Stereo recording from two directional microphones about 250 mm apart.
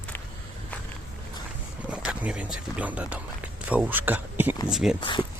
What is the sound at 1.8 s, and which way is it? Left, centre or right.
Speech, centre.